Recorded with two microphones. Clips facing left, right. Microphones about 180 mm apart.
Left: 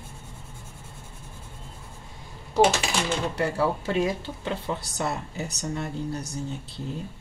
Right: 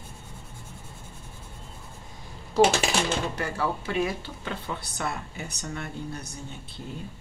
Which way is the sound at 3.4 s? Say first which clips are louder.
Left 4 dB; 35° left (ahead or behind).